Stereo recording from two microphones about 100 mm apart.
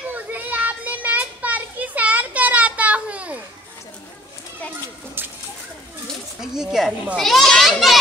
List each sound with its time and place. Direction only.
0.1 s children playing: 15° right (ahead or behind)
5.2 s a sound: 20° right (ahead or behind)
6.4 s children playing: 5° right (ahead or behind)